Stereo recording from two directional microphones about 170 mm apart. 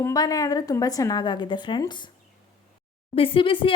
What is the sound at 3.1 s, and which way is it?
Speech, 30° left (ahead or behind).